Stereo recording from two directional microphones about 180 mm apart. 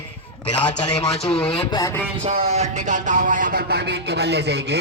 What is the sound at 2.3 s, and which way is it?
A man's voice, 35° right (ahead or behind).